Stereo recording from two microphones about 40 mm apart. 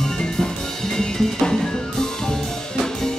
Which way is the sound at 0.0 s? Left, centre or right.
Centre.